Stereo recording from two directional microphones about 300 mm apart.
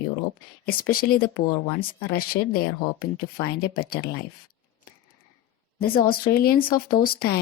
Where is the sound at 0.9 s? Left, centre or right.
Left.